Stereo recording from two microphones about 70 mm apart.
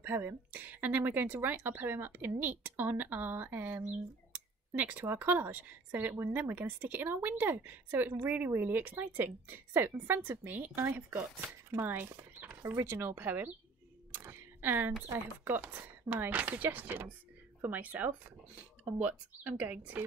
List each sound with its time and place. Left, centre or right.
0.0 s a woman's voice: right
11.1 s speech: right
14.1 s a sound: right
15.4 s speech: right